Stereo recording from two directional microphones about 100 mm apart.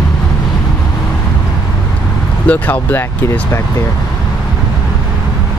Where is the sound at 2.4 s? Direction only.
15° left (ahead or behind).